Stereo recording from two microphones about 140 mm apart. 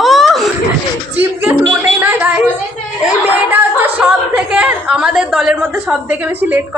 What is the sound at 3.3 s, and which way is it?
A woman's voice, 10° right (ahead or behind).